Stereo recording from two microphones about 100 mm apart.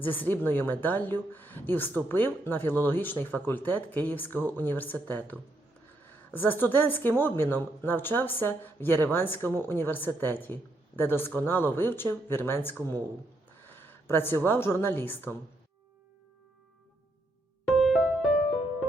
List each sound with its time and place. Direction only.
0.0 s a woman's voice: 20° left (ahead or behind)
17.7 s music: centre (ahead or behind)